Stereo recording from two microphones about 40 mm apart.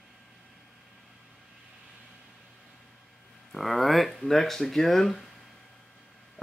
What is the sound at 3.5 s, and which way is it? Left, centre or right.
Speech, centre.